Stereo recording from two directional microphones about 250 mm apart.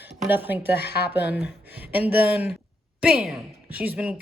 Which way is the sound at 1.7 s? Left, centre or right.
Centre.